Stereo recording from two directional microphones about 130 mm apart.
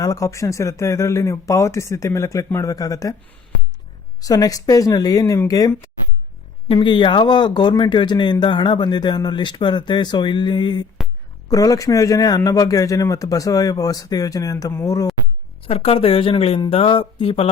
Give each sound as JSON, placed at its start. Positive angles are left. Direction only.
{"t": 0.0, "sound": "a man's voice", "side_deg": 25}
{"t": 4.2, "sound": "a man's voice", "side_deg": 30}
{"t": 6.7, "sound": "a man's voice", "side_deg": 40}
{"t": 15.6, "sound": "speech", "side_deg": 50}